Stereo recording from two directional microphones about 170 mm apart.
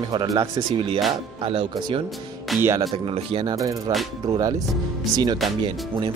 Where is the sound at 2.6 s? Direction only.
15° right (ahead or behind).